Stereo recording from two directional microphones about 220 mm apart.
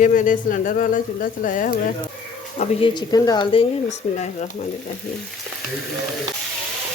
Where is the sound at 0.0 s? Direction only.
35° left (ahead or behind).